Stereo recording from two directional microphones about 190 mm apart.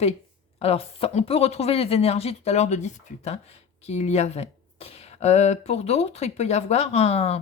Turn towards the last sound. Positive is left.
turn(degrees=35)  # may be behind; listen again after turning